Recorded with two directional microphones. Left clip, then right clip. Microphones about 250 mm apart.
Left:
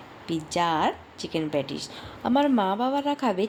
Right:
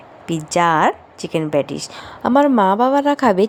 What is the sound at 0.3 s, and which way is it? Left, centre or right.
A woman's voice, right.